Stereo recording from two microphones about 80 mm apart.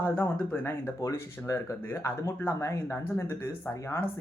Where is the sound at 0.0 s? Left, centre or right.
Left.